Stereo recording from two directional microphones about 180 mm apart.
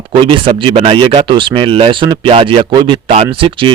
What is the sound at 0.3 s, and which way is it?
Speech, 30° right (ahead or behind).